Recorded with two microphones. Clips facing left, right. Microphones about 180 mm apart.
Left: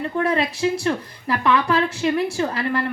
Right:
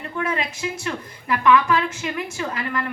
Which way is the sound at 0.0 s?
35° left (ahead or behind).